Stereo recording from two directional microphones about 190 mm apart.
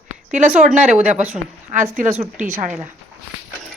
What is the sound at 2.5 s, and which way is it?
Speech, 10° right (ahead or behind).